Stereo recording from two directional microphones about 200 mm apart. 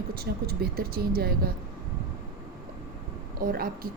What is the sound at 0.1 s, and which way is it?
Speech, 50° right (ahead or behind).